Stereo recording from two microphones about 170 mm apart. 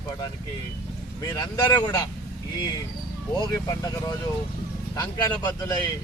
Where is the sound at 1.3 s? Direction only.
25° left (ahead or behind).